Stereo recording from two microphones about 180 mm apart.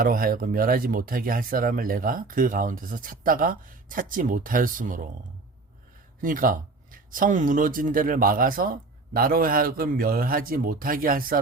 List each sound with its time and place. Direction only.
0.0 s speech: 50° right (ahead or behind)
6.2 s speech: 50° right (ahead or behind)